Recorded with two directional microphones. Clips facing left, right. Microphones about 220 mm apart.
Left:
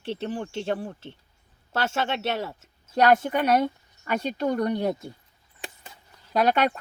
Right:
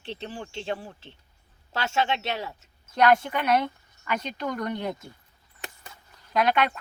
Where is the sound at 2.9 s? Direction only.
40° left (ahead or behind).